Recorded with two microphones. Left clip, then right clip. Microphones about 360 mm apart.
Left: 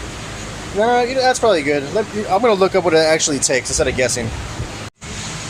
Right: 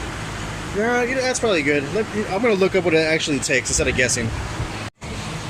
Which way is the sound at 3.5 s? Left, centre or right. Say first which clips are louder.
Right 1 dB; centre.